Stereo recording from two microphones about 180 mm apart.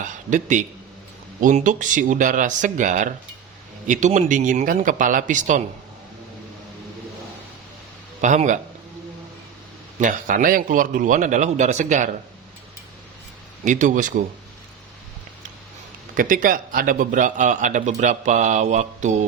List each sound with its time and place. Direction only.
0.0 s a sound: 45° right (ahead or behind)
1.4 s a man's voice: 45° right (ahead or behind)
8.2 s a man's voice: 45° right (ahead or behind)
10.0 s a man's voice: 45° right (ahead or behind)
13.7 s a man's voice: 45° right (ahead or behind)
16.1 s a man's voice: 50° right (ahead or behind)